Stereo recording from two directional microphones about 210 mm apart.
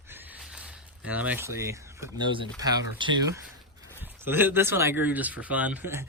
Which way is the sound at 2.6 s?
20° right (ahead or behind).